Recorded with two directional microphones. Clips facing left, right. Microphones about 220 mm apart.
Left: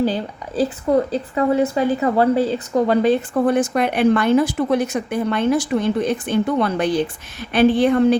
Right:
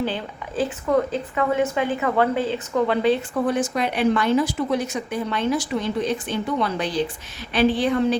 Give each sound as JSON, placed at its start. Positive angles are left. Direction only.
{"t": 0.0, "sound": "speech", "side_deg": 40}